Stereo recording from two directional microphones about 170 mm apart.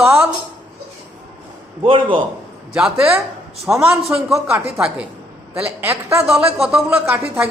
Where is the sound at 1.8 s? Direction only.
30° right (ahead or behind).